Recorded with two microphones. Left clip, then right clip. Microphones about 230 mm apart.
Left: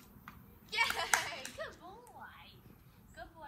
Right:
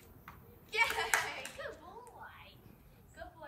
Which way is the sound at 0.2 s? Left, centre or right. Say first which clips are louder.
Even; centre.